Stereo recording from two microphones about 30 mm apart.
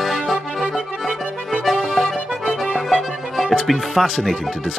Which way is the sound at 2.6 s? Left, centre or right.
Right.